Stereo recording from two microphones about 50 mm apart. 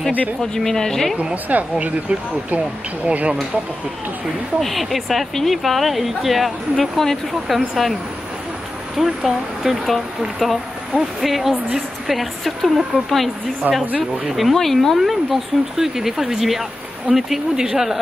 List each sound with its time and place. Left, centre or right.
0.4 s speech: centre
1.3 s speech: right
4.6 s speech: centre
8.9 s speech: centre
13.6 s speech: right
14.2 s speech: centre